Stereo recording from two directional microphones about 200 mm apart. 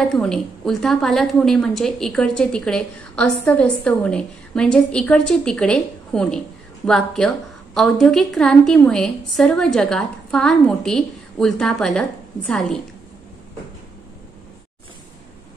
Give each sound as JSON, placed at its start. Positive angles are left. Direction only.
{"t": 0.1, "sound": "a woman's voice", "side_deg": 5}